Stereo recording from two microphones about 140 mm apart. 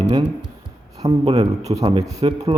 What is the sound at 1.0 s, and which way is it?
Speech, 35° right (ahead or behind).